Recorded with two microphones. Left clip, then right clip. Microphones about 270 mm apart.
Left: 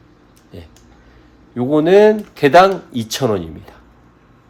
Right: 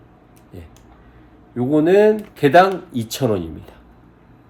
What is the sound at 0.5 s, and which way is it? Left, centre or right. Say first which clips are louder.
Speech: left 3 dB; left.